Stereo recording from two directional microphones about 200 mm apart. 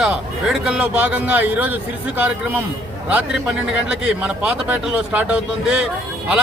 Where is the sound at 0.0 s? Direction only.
5° right (ahead or behind).